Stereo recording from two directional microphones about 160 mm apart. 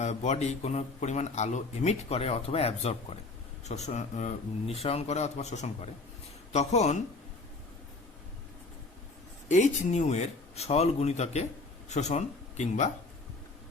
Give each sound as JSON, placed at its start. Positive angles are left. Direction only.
{"t": 0.0, "sound": "a man's voice", "side_deg": 45}
{"t": 9.5, "sound": "a man's voice", "side_deg": 50}